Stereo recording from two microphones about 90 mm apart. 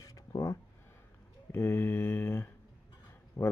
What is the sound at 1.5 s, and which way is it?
Speech, 25° left (ahead or behind).